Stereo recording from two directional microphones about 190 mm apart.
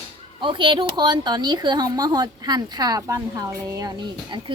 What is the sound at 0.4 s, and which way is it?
A child's voice, 25° right (ahead or behind).